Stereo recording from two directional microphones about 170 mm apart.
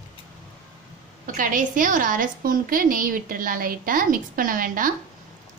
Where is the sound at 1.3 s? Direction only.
50° right (ahead or behind).